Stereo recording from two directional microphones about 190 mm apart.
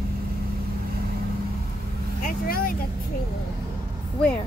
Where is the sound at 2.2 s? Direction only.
50° left (ahead or behind).